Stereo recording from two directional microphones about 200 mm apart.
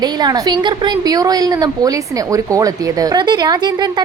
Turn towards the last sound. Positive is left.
turn(degrees=-20)  # may be behind; listen again after turning